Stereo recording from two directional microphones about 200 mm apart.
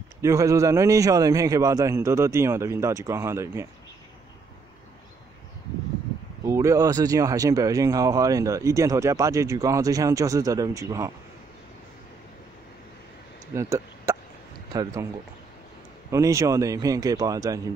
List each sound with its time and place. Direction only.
0.2 s speech: 15° right (ahead or behind)
6.4 s speech: 15° right (ahead or behind)
13.6 s speech: 15° right (ahead or behind)
16.1 s speech: 15° right (ahead or behind)